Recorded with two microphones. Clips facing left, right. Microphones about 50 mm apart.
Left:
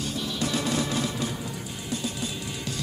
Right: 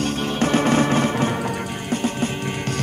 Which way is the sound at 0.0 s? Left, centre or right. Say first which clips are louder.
Right 8 dB; right.